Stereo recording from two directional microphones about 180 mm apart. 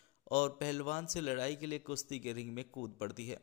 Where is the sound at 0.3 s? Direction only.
40° left (ahead or behind).